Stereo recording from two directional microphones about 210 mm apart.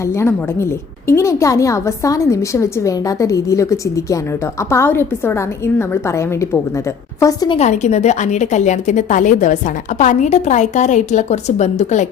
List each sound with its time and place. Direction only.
0.1 s a woman's voice: 10° left (ahead or behind)
7.6 s a woman's voice: 35° left (ahead or behind)